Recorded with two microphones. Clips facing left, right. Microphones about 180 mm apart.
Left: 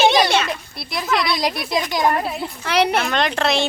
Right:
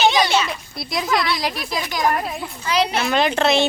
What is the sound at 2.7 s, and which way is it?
Speech, 60° left (ahead or behind).